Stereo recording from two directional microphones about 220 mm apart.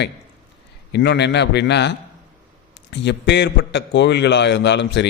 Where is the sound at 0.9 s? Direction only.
50° left (ahead or behind).